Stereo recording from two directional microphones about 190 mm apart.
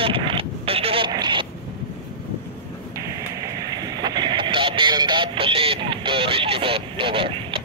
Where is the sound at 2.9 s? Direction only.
15° right (ahead or behind).